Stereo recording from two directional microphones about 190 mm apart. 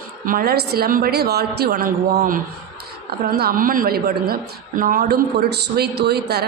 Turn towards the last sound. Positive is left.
turn(degrees=-60)  # may be behind; listen again after turning